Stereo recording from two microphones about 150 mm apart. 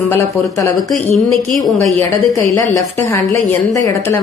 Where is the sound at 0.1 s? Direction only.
20° left (ahead or behind).